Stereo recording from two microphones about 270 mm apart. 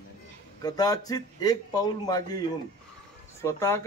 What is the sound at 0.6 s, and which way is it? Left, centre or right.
Speech, centre.